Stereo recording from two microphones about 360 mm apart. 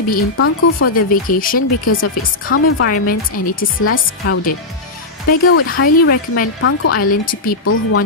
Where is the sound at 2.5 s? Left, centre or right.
Left.